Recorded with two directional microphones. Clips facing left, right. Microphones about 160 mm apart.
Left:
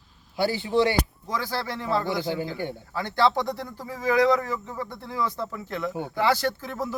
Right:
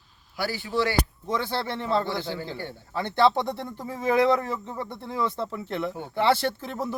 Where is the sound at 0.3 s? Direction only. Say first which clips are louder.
Left 4 dB; 20° left (ahead or behind).